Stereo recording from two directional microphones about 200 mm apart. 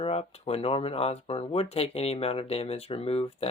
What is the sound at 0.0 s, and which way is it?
Speech, 30° left (ahead or behind).